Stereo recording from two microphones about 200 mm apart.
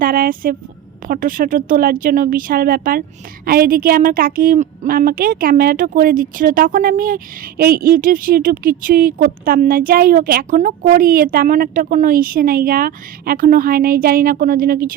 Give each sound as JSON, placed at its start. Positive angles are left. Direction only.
{"t": 0.0, "sound": "a woman's voice", "side_deg": -45}